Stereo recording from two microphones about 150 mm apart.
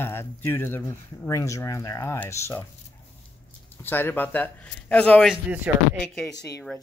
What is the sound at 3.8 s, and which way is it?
Speech, 15° left (ahead or behind).